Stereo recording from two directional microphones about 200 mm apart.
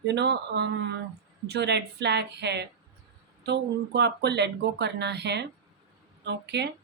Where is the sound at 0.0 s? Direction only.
60° right (ahead or behind).